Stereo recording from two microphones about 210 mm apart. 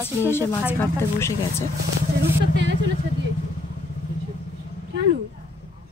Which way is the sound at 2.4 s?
55° right (ahead or behind).